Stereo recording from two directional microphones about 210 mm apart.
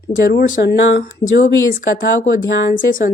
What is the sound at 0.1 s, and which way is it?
Speech, 45° left (ahead or behind).